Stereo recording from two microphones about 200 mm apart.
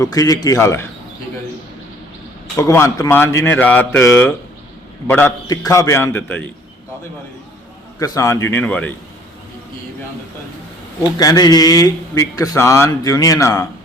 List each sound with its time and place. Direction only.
0.0 s speech: 15° left (ahead or behind)
2.6 s speech: 15° left (ahead or behind)
7.9 s speech: 15° left (ahead or behind)
11.2 s speech: 20° left (ahead or behind)